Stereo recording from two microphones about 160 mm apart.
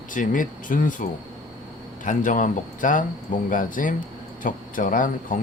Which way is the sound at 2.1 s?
55° left (ahead or behind).